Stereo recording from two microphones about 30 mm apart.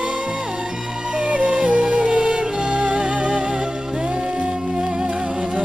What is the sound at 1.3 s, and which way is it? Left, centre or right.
Music, right.